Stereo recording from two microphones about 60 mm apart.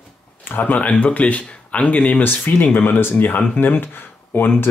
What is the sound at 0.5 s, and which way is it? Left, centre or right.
Speech, left.